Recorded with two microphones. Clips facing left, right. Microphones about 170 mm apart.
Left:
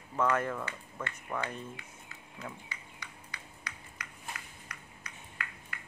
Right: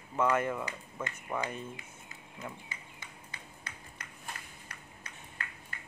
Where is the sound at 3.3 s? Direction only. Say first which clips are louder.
Left 1 dB; 25° right (ahead or behind).